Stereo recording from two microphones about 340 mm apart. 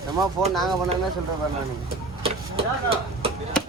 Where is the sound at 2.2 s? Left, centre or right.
Centre.